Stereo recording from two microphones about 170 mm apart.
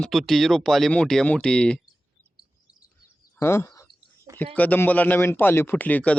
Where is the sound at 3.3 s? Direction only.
15° left (ahead or behind).